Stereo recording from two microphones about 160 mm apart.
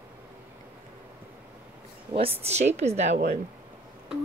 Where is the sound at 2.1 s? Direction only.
35° right (ahead or behind).